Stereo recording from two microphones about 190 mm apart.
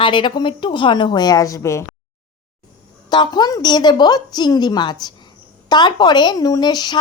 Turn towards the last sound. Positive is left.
turn(degrees=20)  # may be behind; listen again after turning